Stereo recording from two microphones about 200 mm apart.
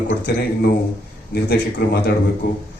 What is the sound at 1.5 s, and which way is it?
Speech, 55° left (ahead or behind).